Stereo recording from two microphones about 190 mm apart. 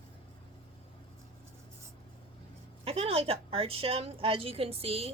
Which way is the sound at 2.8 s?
30° right (ahead or behind).